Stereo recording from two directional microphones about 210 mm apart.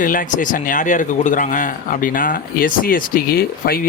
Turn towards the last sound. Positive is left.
turn(degrees=45)  # may be behind; listen again after turning